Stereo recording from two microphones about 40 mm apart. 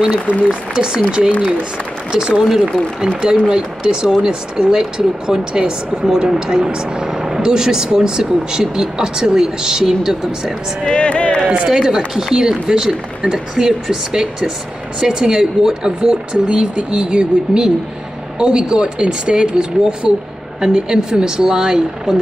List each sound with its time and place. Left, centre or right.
0.5 s speech: right
11.0 s a sound: left
11.4 s speech: right
11.7 s speech: centre